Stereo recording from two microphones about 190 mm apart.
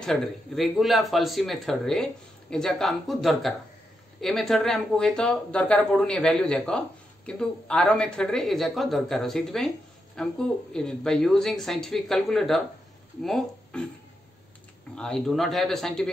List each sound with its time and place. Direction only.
0.0 s speech: centre (ahead or behind)
15.0 s speech: 5° left (ahead or behind)